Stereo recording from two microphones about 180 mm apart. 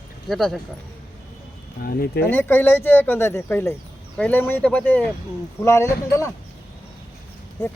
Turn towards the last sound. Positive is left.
turn(degrees=15)  # may be behind; listen again after turning